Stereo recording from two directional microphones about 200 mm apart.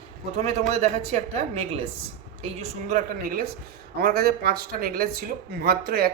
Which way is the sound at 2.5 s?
40° right (ahead or behind).